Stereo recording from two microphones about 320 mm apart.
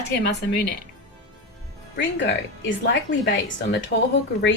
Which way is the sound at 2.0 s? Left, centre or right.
Left.